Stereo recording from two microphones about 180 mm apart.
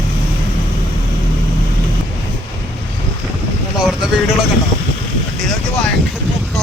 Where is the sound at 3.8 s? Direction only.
5° right (ahead or behind).